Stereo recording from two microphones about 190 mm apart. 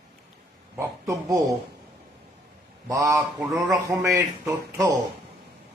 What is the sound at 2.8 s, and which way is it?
Speech, 15° right (ahead or behind).